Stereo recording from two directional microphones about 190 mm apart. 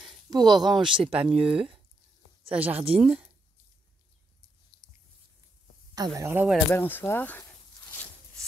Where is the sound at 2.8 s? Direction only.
30° right (ahead or behind).